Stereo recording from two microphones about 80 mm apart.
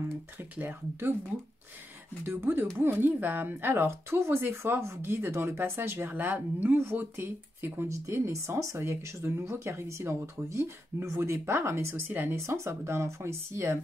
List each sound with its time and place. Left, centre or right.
0.4 s speech: right
2.2 s speech: right
12.4 s speech: right